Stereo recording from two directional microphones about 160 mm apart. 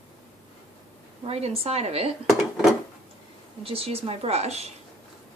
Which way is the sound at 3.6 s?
35° right (ahead or behind).